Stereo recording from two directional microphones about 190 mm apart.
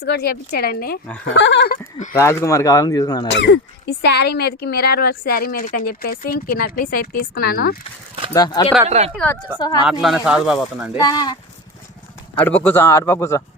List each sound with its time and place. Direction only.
0.0 s speech: 60° left (ahead or behind)
1.3 s speech: 70° left (ahead or behind)
2.1 s speech: 15° left (ahead or behind)
3.2 s speech: 70° left (ahead or behind); by 7.8 s 50° left (ahead or behind)
8.3 s speech: 20° left (ahead or behind)
8.9 s speech: 35° right (ahead or behind)
9.1 s speech: 10° left (ahead or behind)
10.9 s speech: 20° left (ahead or behind)
12.5 s speech: 10° left (ahead or behind)